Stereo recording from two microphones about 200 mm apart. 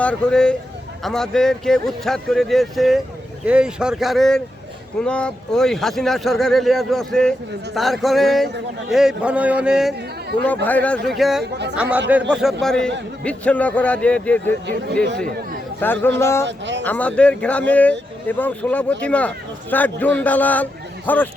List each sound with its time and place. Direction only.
0.0 s speech: 5° left (ahead or behind)
10.4 s a man's voice: 10° left (ahead or behind)
15.8 s speech: 10° left (ahead or behind)
16.5 s speech: 60° right (ahead or behind)
16.8 s speech: 5° left (ahead or behind)